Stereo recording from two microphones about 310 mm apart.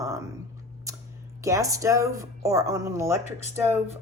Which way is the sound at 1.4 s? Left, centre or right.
Centre.